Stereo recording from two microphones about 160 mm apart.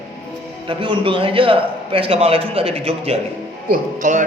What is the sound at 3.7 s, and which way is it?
Speech, 50° right (ahead or behind).